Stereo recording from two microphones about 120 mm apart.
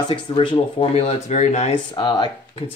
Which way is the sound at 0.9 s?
60° left (ahead or behind).